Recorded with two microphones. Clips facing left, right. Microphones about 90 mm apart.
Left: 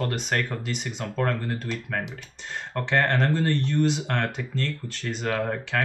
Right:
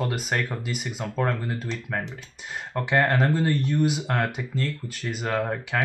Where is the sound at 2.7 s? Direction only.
10° right (ahead or behind).